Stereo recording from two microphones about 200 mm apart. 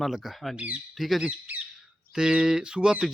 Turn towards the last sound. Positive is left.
turn(degrees=-5)  # may be behind; listen again after turning